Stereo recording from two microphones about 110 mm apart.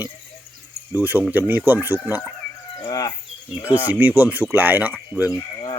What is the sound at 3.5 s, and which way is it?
Speech, 15° right (ahead or behind).